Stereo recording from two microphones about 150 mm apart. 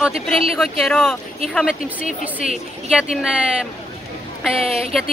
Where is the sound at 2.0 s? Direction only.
45° right (ahead or behind).